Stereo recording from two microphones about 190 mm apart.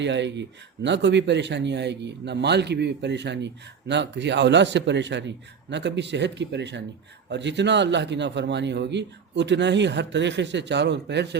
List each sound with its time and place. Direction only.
0.0 s speech: 70° right (ahead or behind)